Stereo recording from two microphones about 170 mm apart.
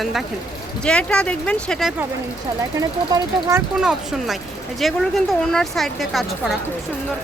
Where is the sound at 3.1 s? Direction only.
20° right (ahead or behind).